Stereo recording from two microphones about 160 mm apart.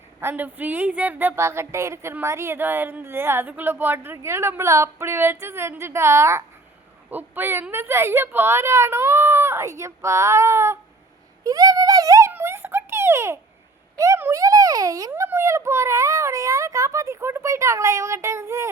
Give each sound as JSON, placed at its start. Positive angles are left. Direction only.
{"t": 0.2, "sound": "a woman's voice", "side_deg": -15}
{"t": 11.4, "sound": "a sound", "side_deg": -25}
{"t": 13.9, "sound": "a child's voice", "side_deg": -20}